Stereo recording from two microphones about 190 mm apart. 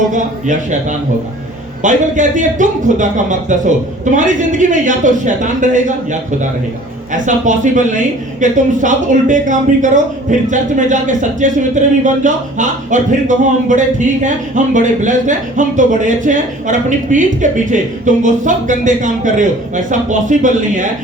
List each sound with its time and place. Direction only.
0.1 s speech: 40° right (ahead or behind)